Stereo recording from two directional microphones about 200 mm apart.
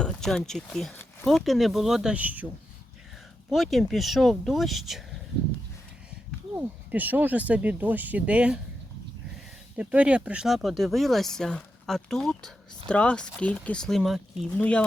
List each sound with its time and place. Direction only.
0.0 s speech: 5° left (ahead or behind)
3.5 s speech: centre (ahead or behind)
6.6 s speech: 10° right (ahead or behind)
9.7 s speech: 5° right (ahead or behind)